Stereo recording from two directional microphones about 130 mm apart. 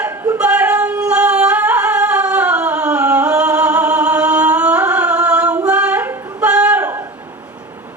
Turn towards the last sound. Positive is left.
turn(degrees=-15)  # may be behind; listen again after turning